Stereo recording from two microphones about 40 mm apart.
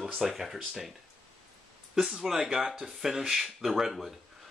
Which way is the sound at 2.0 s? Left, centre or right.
Centre.